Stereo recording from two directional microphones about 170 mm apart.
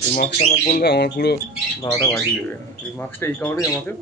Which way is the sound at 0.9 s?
75° left (ahead or behind).